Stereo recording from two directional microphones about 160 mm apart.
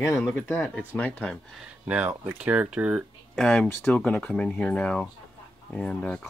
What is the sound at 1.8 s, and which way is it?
Speech, 10° right (ahead or behind).